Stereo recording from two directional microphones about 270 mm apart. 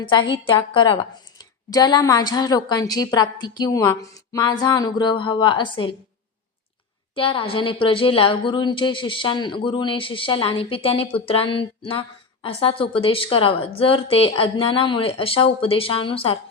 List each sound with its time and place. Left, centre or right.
0.0 s a woman's voice: centre
7.2 s a woman's voice: centre